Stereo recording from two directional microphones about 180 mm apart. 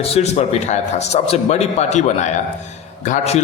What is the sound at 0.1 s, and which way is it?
A man's voice, 40° left (ahead or behind).